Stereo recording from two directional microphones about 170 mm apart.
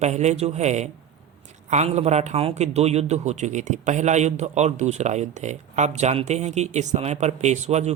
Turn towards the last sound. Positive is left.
turn(degrees=-40)  # may be behind; listen again after turning